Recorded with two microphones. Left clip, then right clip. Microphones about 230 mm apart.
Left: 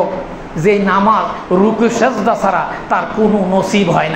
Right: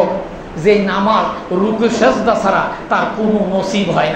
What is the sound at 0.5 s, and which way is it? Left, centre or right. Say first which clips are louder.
A man's voice: left 1 dB; left.